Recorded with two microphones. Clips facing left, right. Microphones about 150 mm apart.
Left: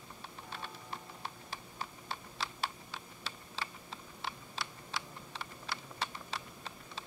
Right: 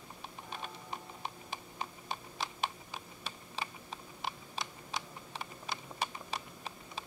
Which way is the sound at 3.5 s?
20° right (ahead or behind).